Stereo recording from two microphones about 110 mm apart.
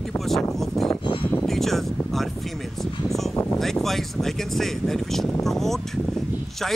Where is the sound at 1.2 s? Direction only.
15° left (ahead or behind).